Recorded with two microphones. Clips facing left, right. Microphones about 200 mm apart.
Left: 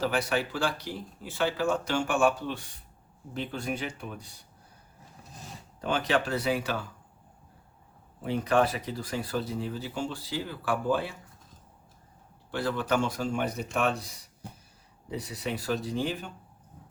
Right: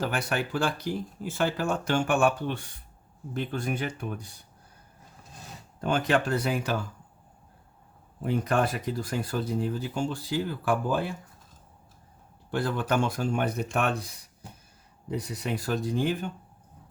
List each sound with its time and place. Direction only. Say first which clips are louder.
0.0 s speech: left 1 dB; 50° right (ahead or behind)
5.8 s speech: right 2 dB; 50° right (ahead or behind)
8.2 s speech: left 1 dB; 50° right (ahead or behind)
12.5 s speech: right 1 dB; 50° right (ahead or behind)
15.1 s speech: right 2 dB; 45° right (ahead or behind)